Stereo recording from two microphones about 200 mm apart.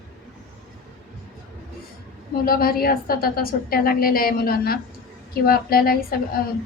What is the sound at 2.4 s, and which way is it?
A woman's voice, 45° left (ahead or behind).